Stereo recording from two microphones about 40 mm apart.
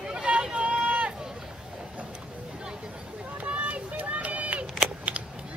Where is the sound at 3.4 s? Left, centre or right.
Right.